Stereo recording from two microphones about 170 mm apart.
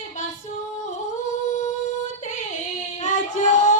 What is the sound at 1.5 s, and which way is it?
Music, 45° left (ahead or behind).